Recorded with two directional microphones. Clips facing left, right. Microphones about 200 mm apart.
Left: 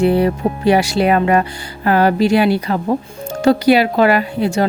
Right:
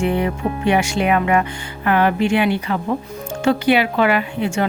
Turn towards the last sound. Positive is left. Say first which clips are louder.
# left 4 dB
turn(degrees=35)  # may be behind; listen again after turning